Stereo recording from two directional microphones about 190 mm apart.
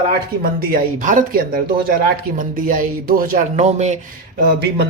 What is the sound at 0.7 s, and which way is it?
Speech, 45° right (ahead or behind).